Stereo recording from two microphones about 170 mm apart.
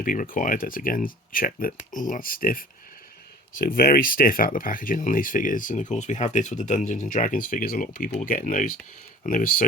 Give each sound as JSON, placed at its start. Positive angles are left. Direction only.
{"t": 0.0, "sound": "speech", "side_deg": 55}